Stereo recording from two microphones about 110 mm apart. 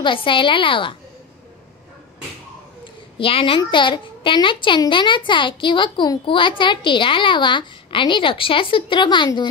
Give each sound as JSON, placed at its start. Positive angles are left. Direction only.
{"t": 0.0, "sound": "a child's voice", "side_deg": 50}
{"t": 2.8, "sound": "a child's voice", "side_deg": 55}